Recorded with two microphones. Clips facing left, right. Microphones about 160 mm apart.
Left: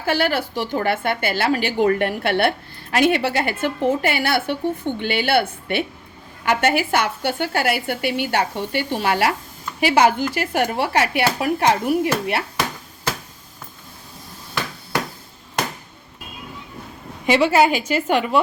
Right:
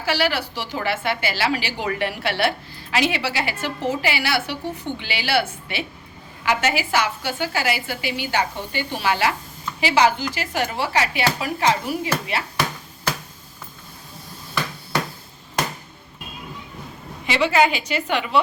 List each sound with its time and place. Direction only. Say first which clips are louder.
0.0 s a woman's voice: left 2 dB; 50° left (ahead or behind)
17.2 s a woman's voice: left 3 dB; 45° left (ahead or behind)